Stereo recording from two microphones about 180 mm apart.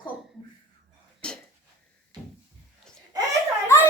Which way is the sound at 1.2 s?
5° left (ahead or behind).